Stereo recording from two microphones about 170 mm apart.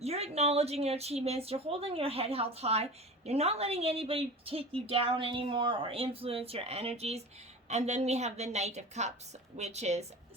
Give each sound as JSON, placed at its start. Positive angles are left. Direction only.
{"t": 0.0, "sound": "speech", "side_deg": -40}